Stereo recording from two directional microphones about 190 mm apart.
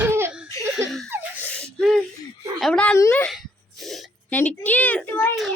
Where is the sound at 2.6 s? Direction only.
5° left (ahead or behind).